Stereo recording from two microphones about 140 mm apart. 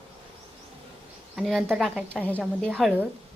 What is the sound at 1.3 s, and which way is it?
Speech, centre (ahead or behind).